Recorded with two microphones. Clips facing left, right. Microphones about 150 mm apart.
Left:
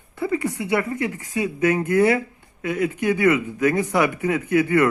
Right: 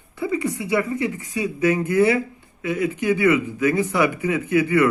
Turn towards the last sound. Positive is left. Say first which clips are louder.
# even
turn(degrees=50)  # may be behind; listen again after turning